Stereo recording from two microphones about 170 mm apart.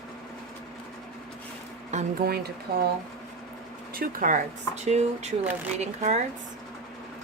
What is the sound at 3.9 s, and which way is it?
Speech, 55° right (ahead or behind).